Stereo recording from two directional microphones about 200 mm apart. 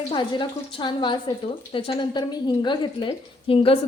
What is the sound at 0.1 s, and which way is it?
A woman's voice, 25° left (ahead or behind).